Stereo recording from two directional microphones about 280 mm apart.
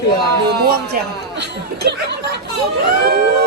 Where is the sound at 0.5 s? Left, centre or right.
Right.